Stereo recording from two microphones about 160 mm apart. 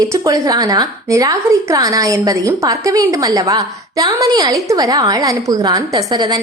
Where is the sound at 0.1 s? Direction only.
20° right (ahead or behind).